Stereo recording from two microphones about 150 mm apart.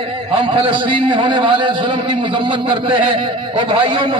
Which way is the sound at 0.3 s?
35° right (ahead or behind).